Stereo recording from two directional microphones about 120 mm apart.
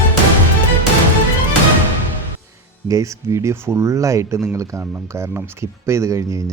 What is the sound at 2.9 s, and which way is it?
Speech, 25° right (ahead or behind).